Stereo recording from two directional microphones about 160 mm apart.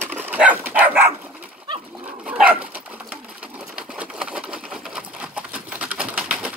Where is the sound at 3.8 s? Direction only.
5° right (ahead or behind).